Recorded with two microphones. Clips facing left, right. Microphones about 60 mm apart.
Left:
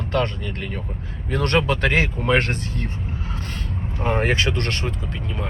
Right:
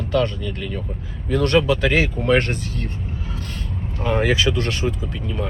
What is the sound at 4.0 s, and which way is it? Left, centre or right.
Speech, left.